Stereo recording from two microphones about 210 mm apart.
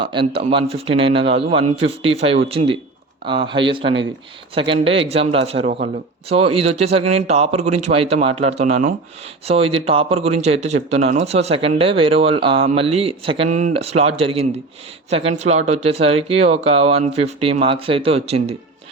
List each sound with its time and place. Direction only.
0.0 s speech: 25° right (ahead or behind)